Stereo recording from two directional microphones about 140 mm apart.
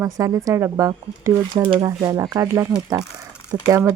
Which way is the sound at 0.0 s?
25° right (ahead or behind).